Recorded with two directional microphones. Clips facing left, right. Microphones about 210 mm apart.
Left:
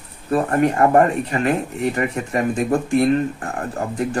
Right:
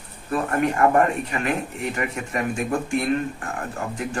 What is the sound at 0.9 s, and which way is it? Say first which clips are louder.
Speech: left 4 dB; 35° left (ahead or behind).